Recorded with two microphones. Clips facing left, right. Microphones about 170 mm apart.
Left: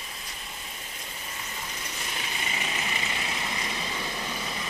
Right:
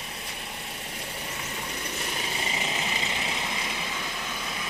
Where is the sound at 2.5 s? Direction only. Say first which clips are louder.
Right 2 dB; 20° right (ahead or behind).